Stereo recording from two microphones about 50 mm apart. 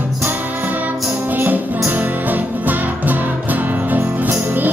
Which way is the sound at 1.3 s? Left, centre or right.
Right.